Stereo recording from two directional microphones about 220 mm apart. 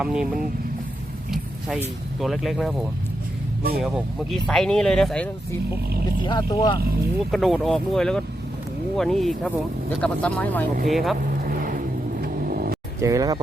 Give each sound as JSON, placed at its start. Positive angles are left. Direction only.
{"t": 0.0, "sound": "speech", "side_deg": -5}
{"t": 1.3, "sound": "vehicle", "side_deg": 0}
{"t": 2.2, "sound": "speech", "side_deg": 0}
{"t": 3.8, "sound": "speech", "side_deg": 0}
{"t": 6.2, "sound": "speech", "side_deg": 20}
{"t": 7.3, "sound": "speech", "side_deg": 0}
{"t": 11.4, "sound": "vehicle", "side_deg": -40}
{"t": 13.0, "sound": "speech", "side_deg": -15}